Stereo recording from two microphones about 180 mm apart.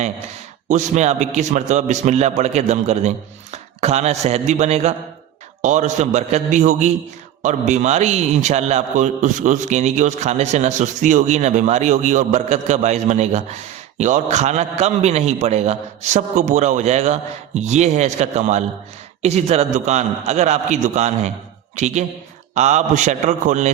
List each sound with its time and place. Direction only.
0.7 s a man's voice: 40° right (ahead or behind)